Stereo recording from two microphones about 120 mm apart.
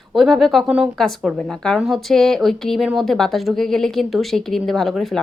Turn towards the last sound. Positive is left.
turn(degrees=0)  # may be behind; listen again after turning